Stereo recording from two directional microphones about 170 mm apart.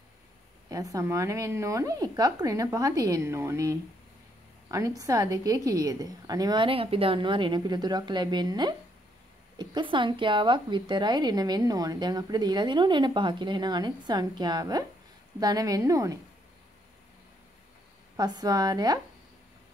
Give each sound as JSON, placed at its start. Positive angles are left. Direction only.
{"t": 0.7, "sound": "a woman's voice", "side_deg": -20}
{"t": 18.1, "sound": "speech", "side_deg": -25}